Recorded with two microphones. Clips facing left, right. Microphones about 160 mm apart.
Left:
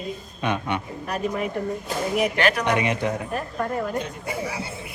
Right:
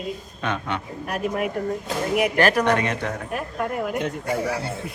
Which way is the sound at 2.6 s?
10° left (ahead or behind).